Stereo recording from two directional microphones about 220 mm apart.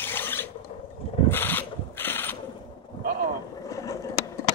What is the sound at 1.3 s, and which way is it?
Mechanisms, 10° left (ahead or behind).